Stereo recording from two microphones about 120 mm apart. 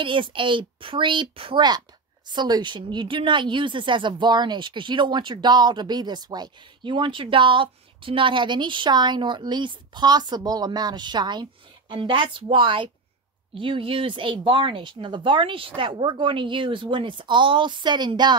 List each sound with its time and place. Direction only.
0.0 s speech: 45° right (ahead or behind)